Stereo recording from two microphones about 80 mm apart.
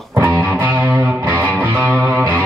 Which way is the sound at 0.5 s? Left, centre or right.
Centre.